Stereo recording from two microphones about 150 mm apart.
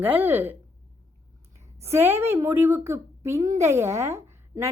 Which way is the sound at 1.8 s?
15° right (ahead or behind).